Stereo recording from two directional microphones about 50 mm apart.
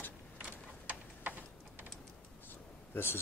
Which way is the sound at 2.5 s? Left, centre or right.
Left.